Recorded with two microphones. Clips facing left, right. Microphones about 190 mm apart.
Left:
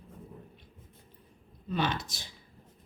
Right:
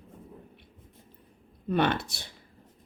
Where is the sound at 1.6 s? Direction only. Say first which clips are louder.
Right 6 dB; 60° right (ahead or behind).